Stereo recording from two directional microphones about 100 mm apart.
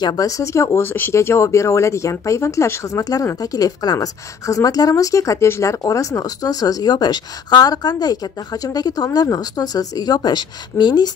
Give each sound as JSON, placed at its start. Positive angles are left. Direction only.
{"t": 0.0, "sound": "a woman's voice", "side_deg": 40}